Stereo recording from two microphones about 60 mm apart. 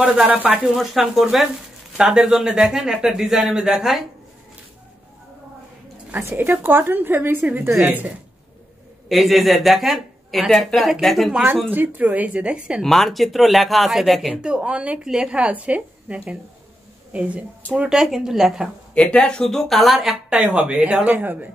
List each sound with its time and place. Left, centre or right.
0.0 s speech: right
0.7 s speech: centre
6.3 s speech: right
9.1 s speech: centre
11.7 s speech: right
12.8 s speech: centre
14.3 s a woman's voice: centre
17.8 s speech: centre
18.9 s speech: centre
19.4 s speech: centre
20.3 s speech: centre